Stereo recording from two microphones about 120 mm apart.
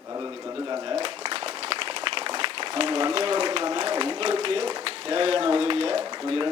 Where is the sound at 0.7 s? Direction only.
50° right (ahead or behind).